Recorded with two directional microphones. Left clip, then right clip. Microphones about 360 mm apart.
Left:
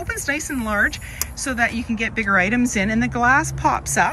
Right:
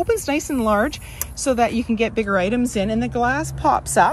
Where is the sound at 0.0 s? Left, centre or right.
Centre.